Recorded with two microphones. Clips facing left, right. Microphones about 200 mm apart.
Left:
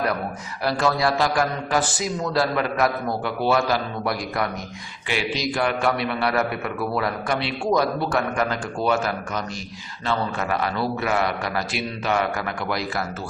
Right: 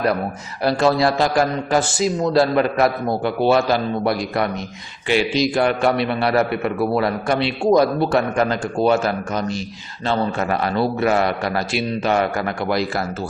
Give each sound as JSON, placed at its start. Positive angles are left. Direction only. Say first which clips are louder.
{"t": 0.6, "sound": "a man's voice", "louder": "right 5 dB", "side_deg": -25}